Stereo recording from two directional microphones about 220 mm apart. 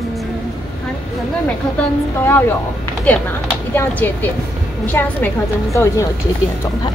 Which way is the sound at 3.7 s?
10° left (ahead or behind).